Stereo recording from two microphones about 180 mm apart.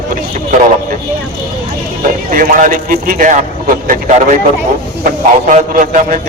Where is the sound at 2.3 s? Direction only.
50° right (ahead or behind).